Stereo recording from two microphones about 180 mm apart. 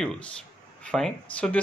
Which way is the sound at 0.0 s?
5° left (ahead or behind).